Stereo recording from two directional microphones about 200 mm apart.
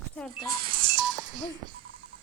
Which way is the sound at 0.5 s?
25° right (ahead or behind).